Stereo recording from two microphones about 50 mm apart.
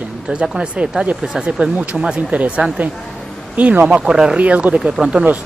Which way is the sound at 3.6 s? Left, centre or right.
Right.